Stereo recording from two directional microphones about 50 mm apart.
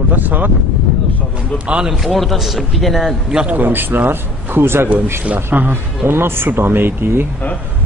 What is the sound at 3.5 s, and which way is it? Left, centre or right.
A man's voice, right.